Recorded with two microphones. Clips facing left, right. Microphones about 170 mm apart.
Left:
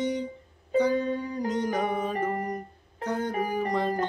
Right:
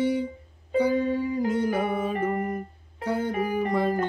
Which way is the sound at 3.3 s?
35° left (ahead or behind).